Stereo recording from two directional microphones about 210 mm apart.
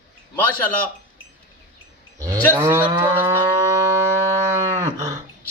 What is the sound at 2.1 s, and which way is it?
Cattle, 15° right (ahead or behind).